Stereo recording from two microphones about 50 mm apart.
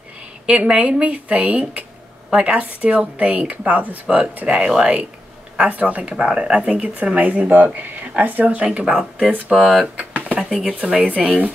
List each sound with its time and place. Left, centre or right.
0.5 s speech: right
4.5 s speech: centre
9.5 s speech: centre
9.9 s drawer open or close: right
10.5 s speech: centre
11.1 s speech: right